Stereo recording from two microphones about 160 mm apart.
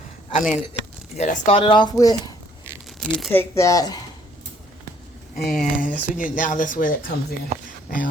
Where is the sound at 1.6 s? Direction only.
30° left (ahead or behind).